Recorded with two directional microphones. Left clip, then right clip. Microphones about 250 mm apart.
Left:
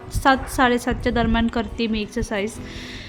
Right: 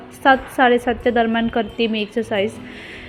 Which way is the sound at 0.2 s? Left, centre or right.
Centre.